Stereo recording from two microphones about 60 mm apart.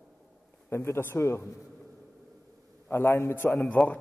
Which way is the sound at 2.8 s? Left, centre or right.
Left.